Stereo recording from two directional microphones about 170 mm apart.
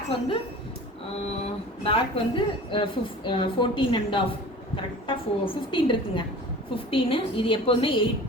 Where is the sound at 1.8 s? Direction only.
30° left (ahead or behind).